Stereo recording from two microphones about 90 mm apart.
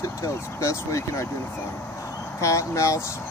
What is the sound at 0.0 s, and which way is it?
Speech, 35° left (ahead or behind).